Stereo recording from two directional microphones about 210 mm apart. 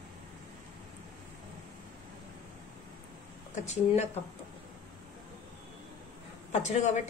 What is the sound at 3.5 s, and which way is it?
Speech, 30° left (ahead or behind).